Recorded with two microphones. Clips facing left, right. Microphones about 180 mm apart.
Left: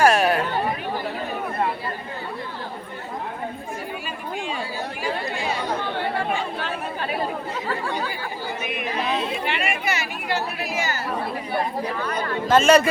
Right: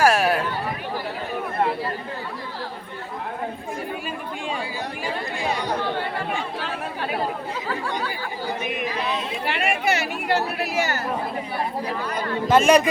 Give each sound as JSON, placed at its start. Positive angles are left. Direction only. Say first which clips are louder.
{"t": 0.0, "sound": "a sound", "louder": "left 1 dB", "side_deg": -5}
{"t": 9.6, "sound": "chatter", "louder": "right 3 dB", "side_deg": -65}
{"t": 12.5, "sound": "a man's voice", "louder": "even", "side_deg": -15}